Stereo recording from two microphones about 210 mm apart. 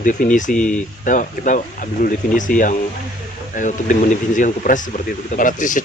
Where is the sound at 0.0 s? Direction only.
40° left (ahead or behind).